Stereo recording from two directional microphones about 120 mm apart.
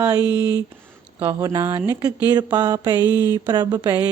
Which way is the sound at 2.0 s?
35° right (ahead or behind).